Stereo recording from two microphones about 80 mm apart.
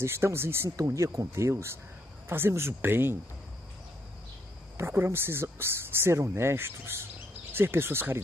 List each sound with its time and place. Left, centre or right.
0.0 s speech: right
0.7 s speech: right
4.7 s speech: right